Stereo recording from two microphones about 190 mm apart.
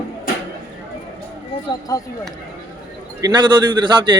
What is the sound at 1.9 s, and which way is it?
Speech, 20° left (ahead or behind).